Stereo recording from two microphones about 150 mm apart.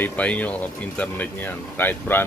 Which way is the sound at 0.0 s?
10° left (ahead or behind).